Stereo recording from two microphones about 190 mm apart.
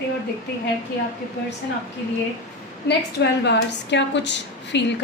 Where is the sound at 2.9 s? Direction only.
65° left (ahead or behind).